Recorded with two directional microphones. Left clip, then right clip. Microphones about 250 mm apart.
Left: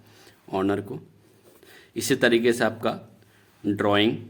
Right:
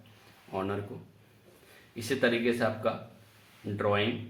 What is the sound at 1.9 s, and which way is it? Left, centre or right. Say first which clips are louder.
Speech: left 7 dB; left.